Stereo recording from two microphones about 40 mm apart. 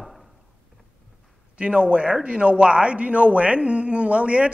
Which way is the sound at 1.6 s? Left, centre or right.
Right.